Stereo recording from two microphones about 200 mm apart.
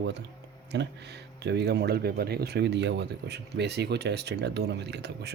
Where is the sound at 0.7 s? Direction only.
60° right (ahead or behind).